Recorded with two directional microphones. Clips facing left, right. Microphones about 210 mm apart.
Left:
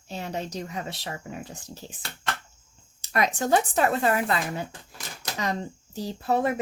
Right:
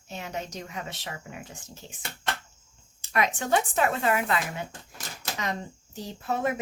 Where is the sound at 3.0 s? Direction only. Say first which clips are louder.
Left 2 dB; 40° left (ahead or behind).